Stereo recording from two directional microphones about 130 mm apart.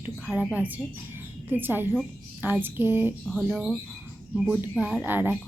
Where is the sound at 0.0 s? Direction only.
10° right (ahead or behind).